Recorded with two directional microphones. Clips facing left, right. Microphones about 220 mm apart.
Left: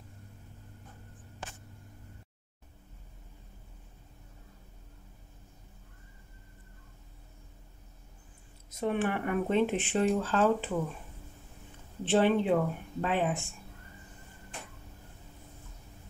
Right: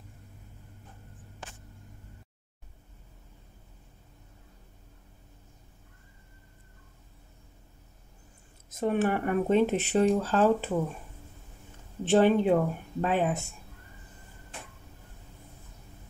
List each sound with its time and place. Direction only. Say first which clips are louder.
8.6 s speech: right 4 dB; 45° right (ahead or behind)
12.0 s speech: right 4 dB; 45° right (ahead or behind)